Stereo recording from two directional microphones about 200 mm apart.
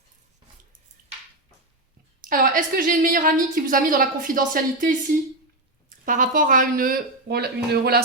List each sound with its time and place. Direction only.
2.3 s a woman's voice: 40° right (ahead or behind)